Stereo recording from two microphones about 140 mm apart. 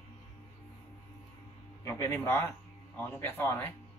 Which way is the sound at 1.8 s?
20° left (ahead or behind).